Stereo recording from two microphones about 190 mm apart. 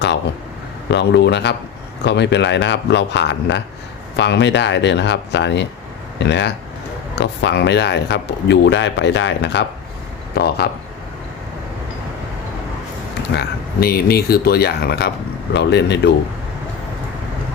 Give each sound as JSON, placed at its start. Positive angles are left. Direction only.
{"t": 0.0, "sound": "a sound", "side_deg": 65}
{"t": 0.9, "sound": "speech", "side_deg": 65}
{"t": 13.3, "sound": "speech", "side_deg": 55}
{"t": 15.5, "sound": "speech", "side_deg": 65}